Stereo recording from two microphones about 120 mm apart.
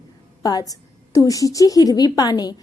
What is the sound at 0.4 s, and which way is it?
A woman's voice, 30° left (ahead or behind).